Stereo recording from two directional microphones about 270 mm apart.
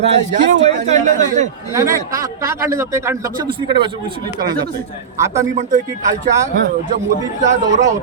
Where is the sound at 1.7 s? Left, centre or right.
Centre.